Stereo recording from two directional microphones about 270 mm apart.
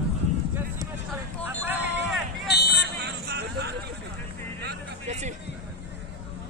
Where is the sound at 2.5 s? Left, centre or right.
Left.